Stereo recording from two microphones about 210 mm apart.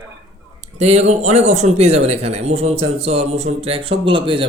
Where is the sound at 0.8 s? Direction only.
30° right (ahead or behind).